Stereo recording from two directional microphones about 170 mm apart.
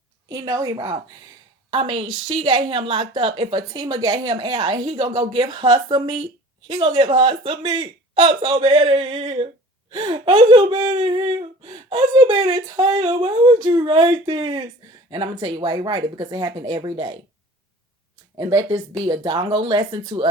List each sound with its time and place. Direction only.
0.3 s a woman's voice: 20° right (ahead or behind)
18.3 s a woman's voice: 20° right (ahead or behind)